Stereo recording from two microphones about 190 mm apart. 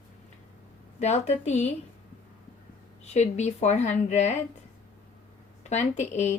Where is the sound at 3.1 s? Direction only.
35° left (ahead or behind).